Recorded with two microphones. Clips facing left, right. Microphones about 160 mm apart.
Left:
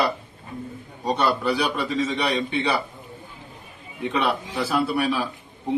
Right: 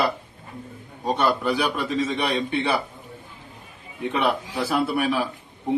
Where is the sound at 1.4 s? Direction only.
10° right (ahead or behind).